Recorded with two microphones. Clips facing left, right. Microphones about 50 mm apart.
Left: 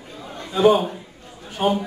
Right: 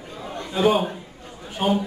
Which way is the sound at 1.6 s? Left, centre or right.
Centre.